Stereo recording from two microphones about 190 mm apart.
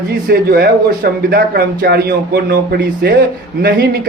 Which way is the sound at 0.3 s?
55° right (ahead or behind).